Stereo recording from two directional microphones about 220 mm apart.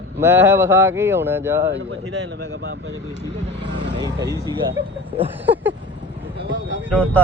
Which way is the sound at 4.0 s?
15° right (ahead or behind).